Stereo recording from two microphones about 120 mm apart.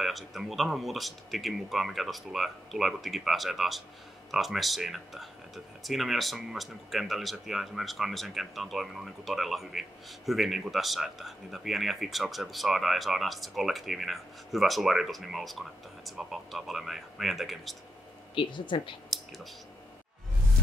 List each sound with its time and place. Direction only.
0.0 s speech: centre (ahead or behind)
18.3 s speech: 45° left (ahead or behind)
19.0 s clicking: centre (ahead or behind)